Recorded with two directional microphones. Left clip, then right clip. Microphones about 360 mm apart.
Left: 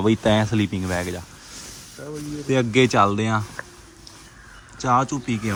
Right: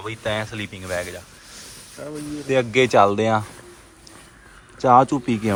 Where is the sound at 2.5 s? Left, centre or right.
Centre.